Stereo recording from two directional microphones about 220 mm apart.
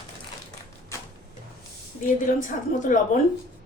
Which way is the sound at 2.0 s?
35° left (ahead or behind).